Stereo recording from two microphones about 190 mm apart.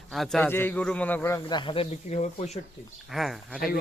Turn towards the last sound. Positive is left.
turn(degrees=0)  # may be behind; listen again after turning